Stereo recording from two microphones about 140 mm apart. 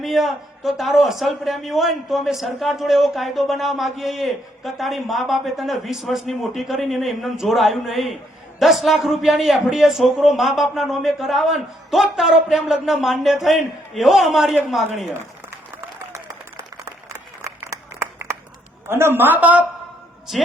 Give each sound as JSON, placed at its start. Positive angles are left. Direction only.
{"t": 0.0, "sound": "a man's voice", "side_deg": 0}
{"t": 16.8, "sound": "a sound", "side_deg": -20}
{"t": 18.9, "sound": "a woman's voice", "side_deg": -15}